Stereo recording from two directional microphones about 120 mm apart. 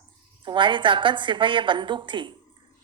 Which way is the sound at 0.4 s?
40° right (ahead or behind).